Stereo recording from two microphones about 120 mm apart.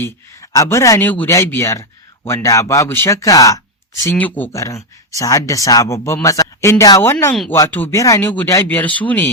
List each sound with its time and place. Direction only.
0.0 s speech: 30° left (ahead or behind)
4.0 s speech: 15° left (ahead or behind)
4.5 s speech: 25° left (ahead or behind)
7.9 s speech: 25° left (ahead or behind)
8.3 s speech: 15° left (ahead or behind)